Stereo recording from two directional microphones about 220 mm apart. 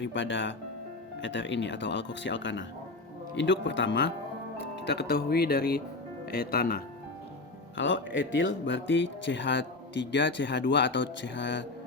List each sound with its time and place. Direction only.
0.0 s speech: 60° left (ahead or behind)
7.8 s speech: 55° left (ahead or behind)